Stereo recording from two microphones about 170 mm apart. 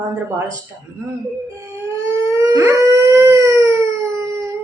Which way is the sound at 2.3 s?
20° right (ahead or behind).